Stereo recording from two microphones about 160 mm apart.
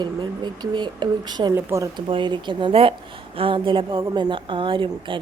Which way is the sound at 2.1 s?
30° right (ahead or behind).